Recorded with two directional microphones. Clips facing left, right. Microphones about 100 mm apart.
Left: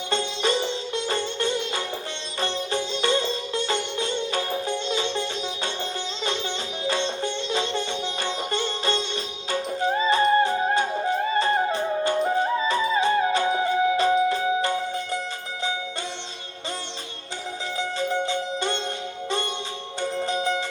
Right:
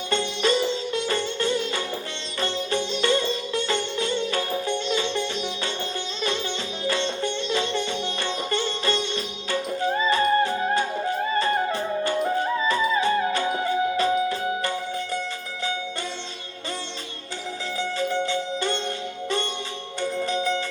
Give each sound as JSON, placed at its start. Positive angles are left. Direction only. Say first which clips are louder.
{"t": 0.1, "sound": "music", "louder": "right 2 dB", "side_deg": 20}
{"t": 2.4, "sound": "sitar", "louder": "right 1 dB", "side_deg": 20}
{"t": 6.8, "sound": "music", "louder": "even", "side_deg": 20}
{"t": 17.7, "sound": "music", "louder": "even", "side_deg": 20}
{"t": 20.0, "sound": "music", "louder": "even", "side_deg": 20}